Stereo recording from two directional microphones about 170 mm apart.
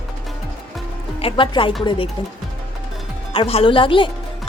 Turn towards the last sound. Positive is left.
turn(degrees=30)  # may be behind; listen again after turning